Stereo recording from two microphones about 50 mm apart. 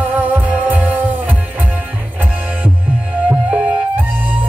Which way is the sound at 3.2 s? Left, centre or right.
Right.